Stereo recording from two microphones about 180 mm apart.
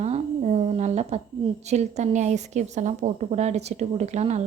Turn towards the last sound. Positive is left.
turn(degrees=-40)  # may be behind; listen again after turning